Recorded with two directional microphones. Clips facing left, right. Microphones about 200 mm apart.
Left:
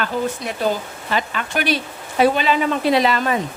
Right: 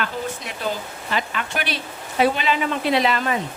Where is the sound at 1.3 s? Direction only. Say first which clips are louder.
Left 5 dB; 45° left (ahead or behind).